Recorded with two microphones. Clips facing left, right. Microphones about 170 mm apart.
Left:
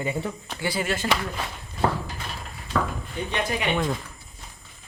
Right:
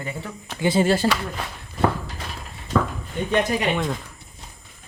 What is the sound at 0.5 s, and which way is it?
Speech, 25° right (ahead or behind).